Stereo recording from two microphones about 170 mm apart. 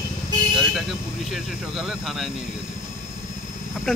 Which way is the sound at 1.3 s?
Centre (ahead or behind).